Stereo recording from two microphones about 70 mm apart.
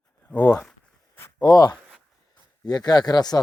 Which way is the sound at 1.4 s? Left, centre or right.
Left.